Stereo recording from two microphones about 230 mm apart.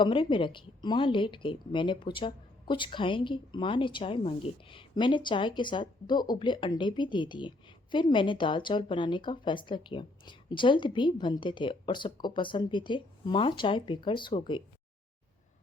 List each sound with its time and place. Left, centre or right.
0.0 s a woman's voice: left